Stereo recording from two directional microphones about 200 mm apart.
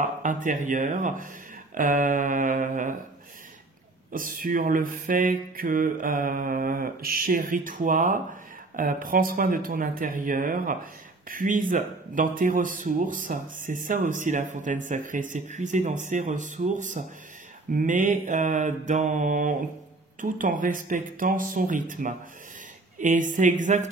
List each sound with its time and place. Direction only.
0.0 s speech: 40° right (ahead or behind)
4.1 s mantra: 45° right (ahead or behind)
17.6 s speech: 40° right (ahead or behind)